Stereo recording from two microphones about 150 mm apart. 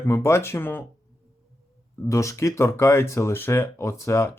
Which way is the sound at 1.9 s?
20° left (ahead or behind).